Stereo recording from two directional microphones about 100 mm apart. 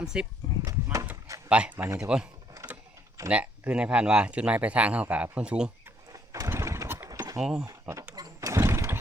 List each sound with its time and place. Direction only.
0.0 s speech: 5° right (ahead or behind)
1.5 s speech: 10° right (ahead or behind)
3.2 s speech: 15° right (ahead or behind)
6.1 s vehicle: 35° right (ahead or behind)
6.5 s a sound: 30° right (ahead or behind)
7.1 s a sound: 35° right (ahead or behind)
7.3 s speech: 5° right (ahead or behind)
7.7 s speech: 30° right (ahead or behind)
8.1 s a sound: 35° right (ahead or behind)